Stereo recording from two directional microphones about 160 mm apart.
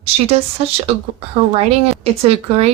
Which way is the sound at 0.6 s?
40° right (ahead or behind).